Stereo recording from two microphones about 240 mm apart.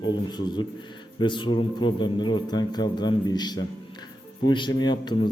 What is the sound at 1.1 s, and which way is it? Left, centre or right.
A man's voice, centre.